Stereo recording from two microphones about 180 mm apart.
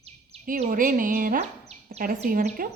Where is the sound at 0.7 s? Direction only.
50° right (ahead or behind).